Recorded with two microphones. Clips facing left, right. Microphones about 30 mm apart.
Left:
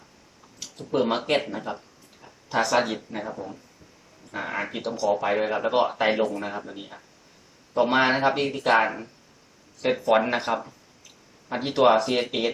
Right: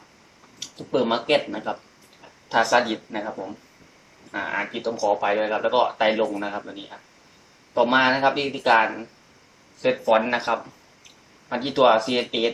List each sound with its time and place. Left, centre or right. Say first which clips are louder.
0.6 s speech: right 2 dB; centre
2.2 s a sound: right 4 dB; centre
3.2 s speech: right 3 dB; centre